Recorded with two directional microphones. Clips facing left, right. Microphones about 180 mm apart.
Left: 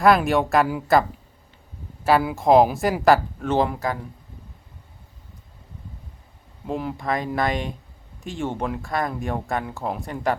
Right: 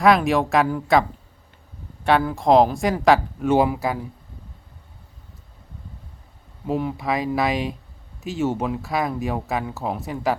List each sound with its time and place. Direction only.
0.0 s speech: centre (ahead or behind)
2.0 s speech: 5° left (ahead or behind)
3.4 s speech: 10° right (ahead or behind)
6.7 s speech: 5° right (ahead or behind)